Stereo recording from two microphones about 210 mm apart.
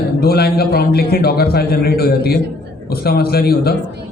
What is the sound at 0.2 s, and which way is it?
A man's voice, 45° left (ahead or behind).